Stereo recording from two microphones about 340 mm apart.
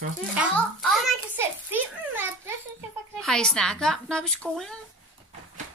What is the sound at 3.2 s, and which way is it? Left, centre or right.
A child's voice, centre.